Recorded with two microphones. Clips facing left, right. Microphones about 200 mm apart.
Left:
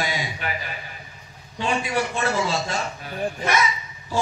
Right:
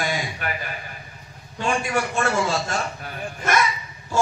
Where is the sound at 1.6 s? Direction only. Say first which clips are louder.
Even; 45° right (ahead or behind).